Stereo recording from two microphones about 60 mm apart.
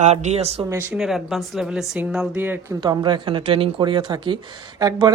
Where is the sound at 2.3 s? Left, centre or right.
Right.